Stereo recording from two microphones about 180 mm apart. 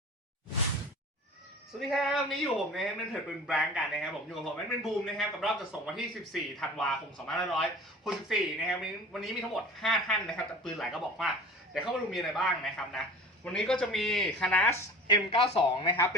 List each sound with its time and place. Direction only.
1.8 s a man's voice: centre (ahead or behind)
15.0 s speech: 30° left (ahead or behind)